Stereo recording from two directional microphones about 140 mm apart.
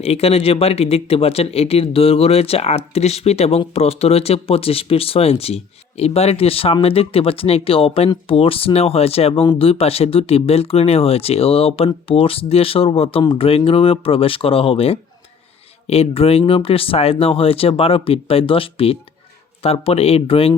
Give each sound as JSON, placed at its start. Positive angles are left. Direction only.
{"t": 0.0, "sound": "speech", "side_deg": 45}